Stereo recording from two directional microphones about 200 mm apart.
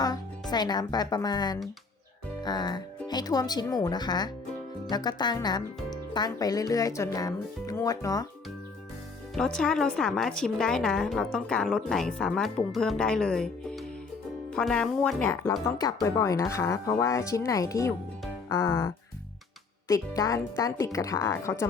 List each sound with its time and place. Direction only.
0.5 s speech: 20° left (ahead or behind)
9.3 s speech: 5° left (ahead or behind)
15.6 s speech: 20° left (ahead or behind)
18.4 s music: 15° left (ahead or behind)
19.9 s speech: 15° left (ahead or behind)